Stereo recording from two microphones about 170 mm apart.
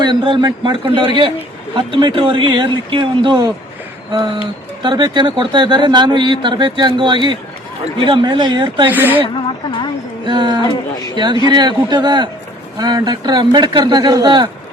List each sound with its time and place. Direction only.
0.0 s a man's voice: 25° right (ahead or behind)
4.8 s a man's voice: 25° right (ahead or behind)
8.9 s speech: 10° right (ahead or behind)
9.2 s speech: 30° left (ahead or behind)
10.2 s a man's voice: 25° right (ahead or behind)